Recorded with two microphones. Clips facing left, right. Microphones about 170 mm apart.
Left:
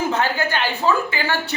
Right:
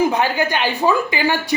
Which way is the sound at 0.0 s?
15° right (ahead or behind).